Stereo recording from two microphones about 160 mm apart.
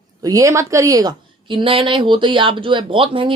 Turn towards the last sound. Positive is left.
turn(degrees=-35)  # may be behind; listen again after turning